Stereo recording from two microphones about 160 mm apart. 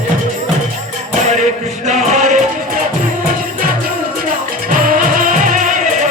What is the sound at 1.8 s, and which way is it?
Music, 45° right (ahead or behind).